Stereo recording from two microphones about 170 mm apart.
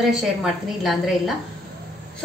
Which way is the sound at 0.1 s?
Centre (ahead or behind).